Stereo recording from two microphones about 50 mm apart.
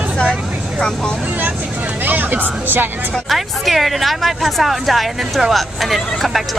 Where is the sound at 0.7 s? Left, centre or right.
Centre.